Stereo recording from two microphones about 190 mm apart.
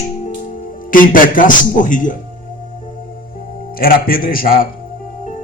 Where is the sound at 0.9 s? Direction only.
45° left (ahead or behind).